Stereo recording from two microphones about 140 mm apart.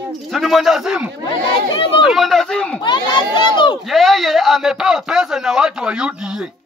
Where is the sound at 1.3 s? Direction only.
35° left (ahead or behind).